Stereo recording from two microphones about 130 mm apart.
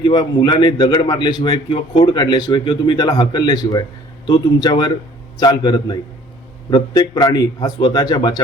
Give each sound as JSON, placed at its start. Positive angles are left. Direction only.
{"t": 0.0, "sound": "a man's voice", "side_deg": 35}